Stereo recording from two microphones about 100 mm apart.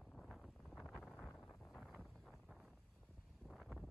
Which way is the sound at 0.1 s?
5° left (ahead or behind).